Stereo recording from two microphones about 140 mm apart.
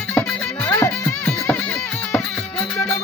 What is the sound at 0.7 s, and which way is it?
Music, 25° left (ahead or behind).